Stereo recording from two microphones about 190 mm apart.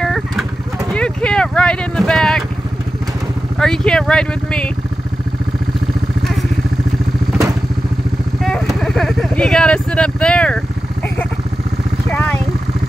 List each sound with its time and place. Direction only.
0.0 s vehicle: centre (ahead or behind)
0.9 s speech: 5° left (ahead or behind)
3.5 s speech: 5° left (ahead or behind)
8.4 s speech: centre (ahead or behind)
12.1 s vehicle: 10° left (ahead or behind)